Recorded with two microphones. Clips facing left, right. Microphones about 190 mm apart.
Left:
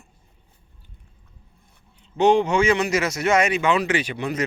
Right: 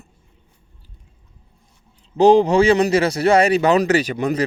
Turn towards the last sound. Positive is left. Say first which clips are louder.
# right 6 dB
turn(degrees=-40)  # may be behind; listen again after turning